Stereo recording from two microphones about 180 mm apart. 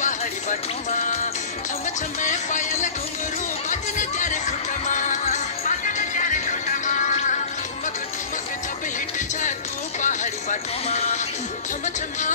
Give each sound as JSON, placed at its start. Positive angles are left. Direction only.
{"t": 0.0, "sound": "music", "side_deg": 45}
{"t": 2.2, "sound": "speech", "side_deg": 45}
{"t": 4.0, "sound": "music", "side_deg": 45}
{"t": 10.0, "sound": "music", "side_deg": 40}